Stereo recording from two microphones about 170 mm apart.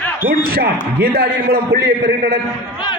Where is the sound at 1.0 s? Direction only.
65° right (ahead or behind).